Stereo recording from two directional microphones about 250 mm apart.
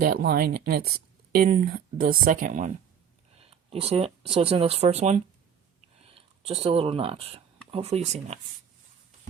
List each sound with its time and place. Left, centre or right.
0.0 s speech: right